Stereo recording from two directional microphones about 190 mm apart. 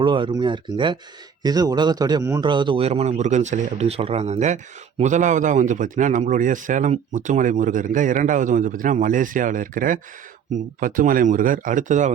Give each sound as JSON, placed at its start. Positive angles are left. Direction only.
{"t": 0.0, "sound": "a man's voice", "side_deg": -25}